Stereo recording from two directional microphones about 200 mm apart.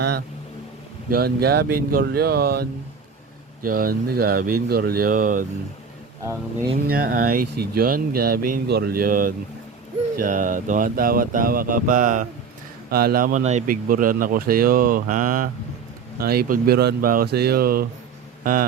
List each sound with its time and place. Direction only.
1.1 s speech: 50° right (ahead or behind)
6.8 s speech: 45° right (ahead or behind)